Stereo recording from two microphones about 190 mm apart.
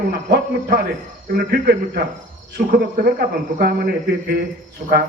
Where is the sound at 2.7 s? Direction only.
50° right (ahead or behind).